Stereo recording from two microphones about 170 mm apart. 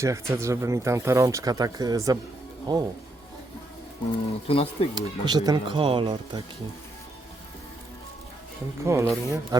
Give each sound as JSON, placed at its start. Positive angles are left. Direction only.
{"t": 0.0, "sound": "speech", "side_deg": -15}
{"t": 4.4, "sound": "speech", "side_deg": 35}
{"t": 4.9, "sound": "speech", "side_deg": -25}
{"t": 8.8, "sound": "speech", "side_deg": -15}